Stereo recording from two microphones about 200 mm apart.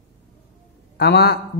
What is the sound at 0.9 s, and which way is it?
Speech, 55° left (ahead or behind).